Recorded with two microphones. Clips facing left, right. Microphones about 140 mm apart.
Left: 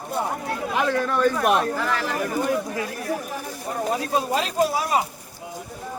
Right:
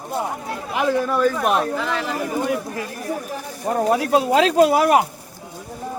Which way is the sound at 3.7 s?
70° right (ahead or behind).